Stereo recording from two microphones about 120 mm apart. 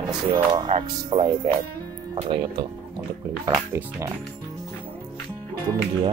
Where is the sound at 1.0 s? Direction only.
45° right (ahead or behind).